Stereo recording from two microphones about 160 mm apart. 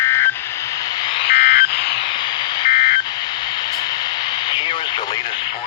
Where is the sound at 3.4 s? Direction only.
25° left (ahead or behind).